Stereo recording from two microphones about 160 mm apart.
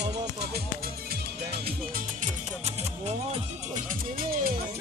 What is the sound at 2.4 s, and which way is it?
Speech, 40° right (ahead or behind).